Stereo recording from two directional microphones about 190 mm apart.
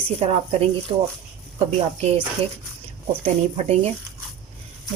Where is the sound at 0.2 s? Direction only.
35° right (ahead or behind).